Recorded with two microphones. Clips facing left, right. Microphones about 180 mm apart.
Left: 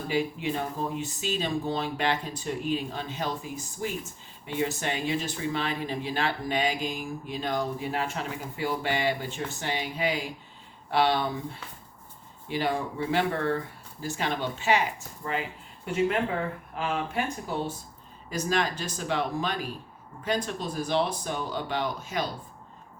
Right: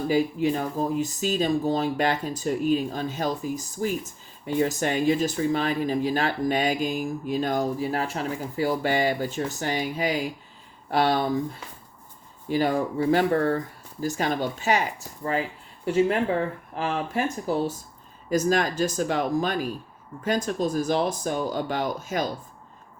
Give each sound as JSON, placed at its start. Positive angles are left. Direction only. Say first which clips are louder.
{"t": 0.1, "sound": "speech", "louder": "right 5 dB", "side_deg": -40}
{"t": 16.7, "sound": "speech", "louder": "right 2 dB", "side_deg": -35}